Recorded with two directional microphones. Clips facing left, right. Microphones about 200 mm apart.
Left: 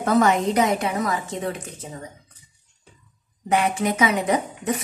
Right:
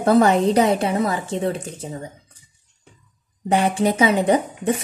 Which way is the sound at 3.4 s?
30° right (ahead or behind).